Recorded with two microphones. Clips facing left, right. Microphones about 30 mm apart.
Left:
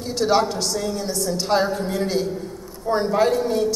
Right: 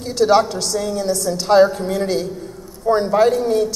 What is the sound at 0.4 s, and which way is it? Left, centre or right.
A woman's voice, centre.